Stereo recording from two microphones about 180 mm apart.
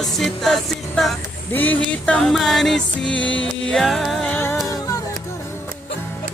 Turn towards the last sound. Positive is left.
turn(degrees=20)  # may be behind; listen again after turning